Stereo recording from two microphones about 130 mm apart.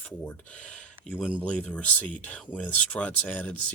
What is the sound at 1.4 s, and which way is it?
Speech, 10° left (ahead or behind).